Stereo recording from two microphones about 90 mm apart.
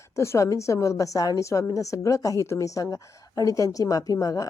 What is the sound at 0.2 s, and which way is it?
A woman's voice, 35° left (ahead or behind).